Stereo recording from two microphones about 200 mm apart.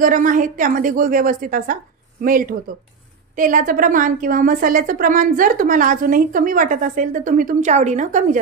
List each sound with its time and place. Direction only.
0.0 s a woman's voice: 40° right (ahead or behind)